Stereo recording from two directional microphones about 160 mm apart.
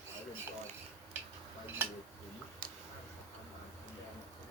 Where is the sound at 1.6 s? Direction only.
15° right (ahead or behind).